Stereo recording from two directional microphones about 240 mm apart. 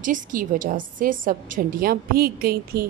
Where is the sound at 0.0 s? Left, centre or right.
Right.